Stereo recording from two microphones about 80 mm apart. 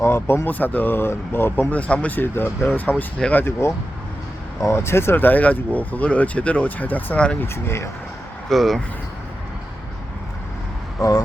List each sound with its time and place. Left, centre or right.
0.0 s speech: left
1.7 s speech: centre
3.2 s speech: centre
3.4 s speech: left; by 7.3 s centre
7.4 s speech: left
8.4 s speech: centre